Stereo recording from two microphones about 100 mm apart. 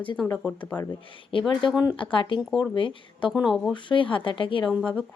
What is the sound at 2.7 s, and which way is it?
Speech, 55° left (ahead or behind).